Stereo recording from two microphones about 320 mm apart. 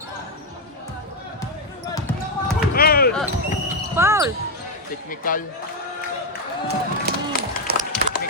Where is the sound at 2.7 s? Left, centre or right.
Left.